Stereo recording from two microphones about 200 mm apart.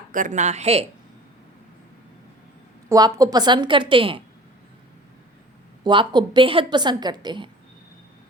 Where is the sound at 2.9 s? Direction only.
20° right (ahead or behind).